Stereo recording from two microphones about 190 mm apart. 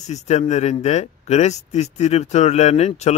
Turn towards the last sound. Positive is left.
turn(degrees=35)  # may be behind; listen again after turning